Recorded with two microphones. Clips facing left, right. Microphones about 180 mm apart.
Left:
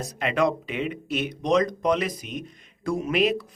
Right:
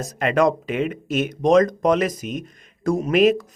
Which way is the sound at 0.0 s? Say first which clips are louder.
Right 5 dB; 45° right (ahead or behind).